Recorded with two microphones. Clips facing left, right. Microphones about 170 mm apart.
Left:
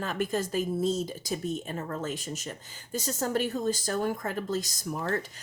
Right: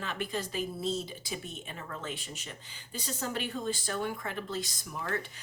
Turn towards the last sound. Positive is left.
turn(degrees=40)  # may be behind; listen again after turning